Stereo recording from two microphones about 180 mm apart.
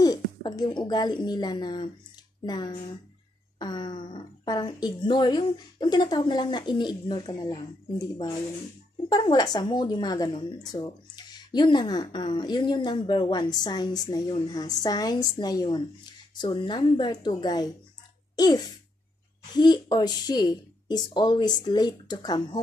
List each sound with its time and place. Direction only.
0.0 s a woman's voice: 20° left (ahead or behind)